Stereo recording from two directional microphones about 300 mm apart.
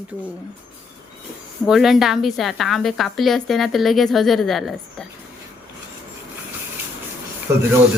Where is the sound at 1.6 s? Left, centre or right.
Centre.